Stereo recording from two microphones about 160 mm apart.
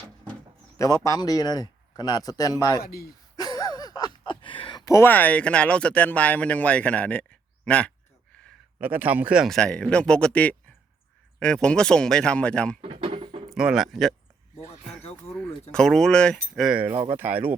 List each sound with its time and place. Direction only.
0.8 s speech: 20° left (ahead or behind)
2.8 s speech: 75° left (ahead or behind)
3.3 s a sound: 25° left (ahead or behind)
4.9 s speech: 15° left (ahead or behind)
8.8 s speech: 10° right (ahead or behind); by 12.8 s 5° left (ahead or behind)
12.8 s a sound: 35° right (ahead or behind)
13.5 s speech: 5° right (ahead or behind)
15.7 s speech: 5° left (ahead or behind)
16.9 s speech: 25° right (ahead or behind)
17.2 s speech: 10° right (ahead or behind)